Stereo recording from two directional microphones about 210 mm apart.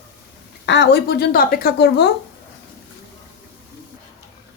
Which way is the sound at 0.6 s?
55° left (ahead or behind).